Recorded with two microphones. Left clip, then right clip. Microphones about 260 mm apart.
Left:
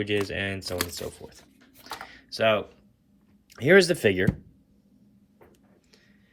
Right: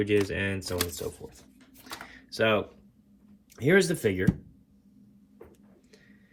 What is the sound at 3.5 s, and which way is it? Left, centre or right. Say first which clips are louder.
Speech: left 5 dB; centre.